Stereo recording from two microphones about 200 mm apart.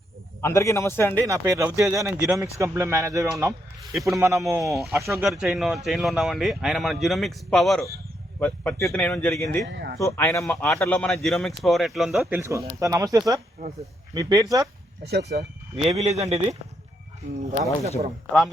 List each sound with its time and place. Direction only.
0.4 s speech: 15° left (ahead or behind)
1.1 s speech: 15° right (ahead or behind)
4.8 s speech: 5° right (ahead or behind); by 9.6 s 10° left (ahead or behind)
9.6 s speech: 55° right (ahead or behind)
10.0 s speech: 15° left (ahead or behind); by 12.4 s centre (ahead or behind)
12.4 s speech: 15° right (ahead or behind)
15.0 s speech: 55° right (ahead or behind)
15.7 s speech: 30° right (ahead or behind)